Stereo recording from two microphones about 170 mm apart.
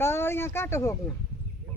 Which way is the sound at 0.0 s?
15° left (ahead or behind).